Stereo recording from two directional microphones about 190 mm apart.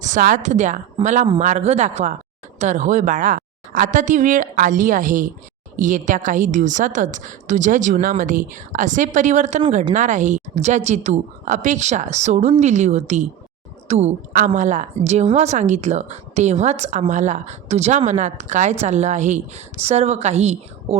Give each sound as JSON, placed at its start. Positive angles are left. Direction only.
{"t": 0.0, "sound": "a woman's voice", "side_deg": -40}